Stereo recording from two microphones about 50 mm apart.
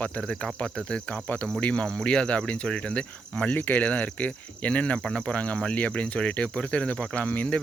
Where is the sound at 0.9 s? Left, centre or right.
Left.